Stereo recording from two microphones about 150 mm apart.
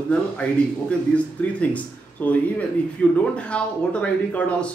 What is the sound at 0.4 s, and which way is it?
Speech, 10° left (ahead or behind).